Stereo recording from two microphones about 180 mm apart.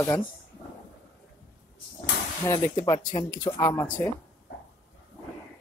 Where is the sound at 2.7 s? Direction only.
25° left (ahead or behind).